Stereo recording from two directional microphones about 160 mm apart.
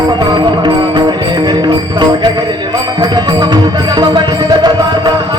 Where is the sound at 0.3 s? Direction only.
30° right (ahead or behind).